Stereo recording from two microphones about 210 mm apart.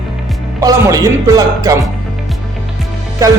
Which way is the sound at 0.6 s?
15° right (ahead or behind).